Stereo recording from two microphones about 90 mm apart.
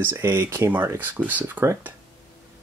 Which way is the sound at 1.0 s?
20° right (ahead or behind).